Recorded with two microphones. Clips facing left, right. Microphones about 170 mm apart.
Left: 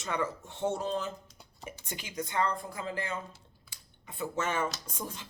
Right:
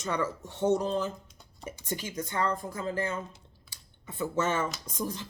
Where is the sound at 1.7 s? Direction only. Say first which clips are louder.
Right 8 dB; 40° right (ahead or behind).